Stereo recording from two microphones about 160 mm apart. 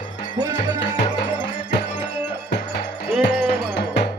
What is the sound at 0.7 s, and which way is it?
Music, 90° left.